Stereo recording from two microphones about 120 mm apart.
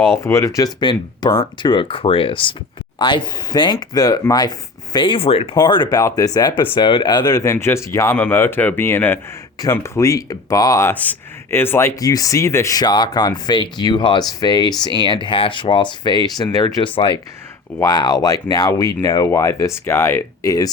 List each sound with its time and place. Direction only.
0.2 s speech: 25° left (ahead or behind); by 5.5 s 55° left (ahead or behind)
5.5 s speech: 40° left (ahead or behind)
6.6 s speech: 40° left (ahead or behind)
7.5 s speech: 20° left (ahead or behind)
10.9 s speech: 15° left (ahead or behind); by 17.2 s 45° left (ahead or behind)
17.7 s speech: 30° left (ahead or behind)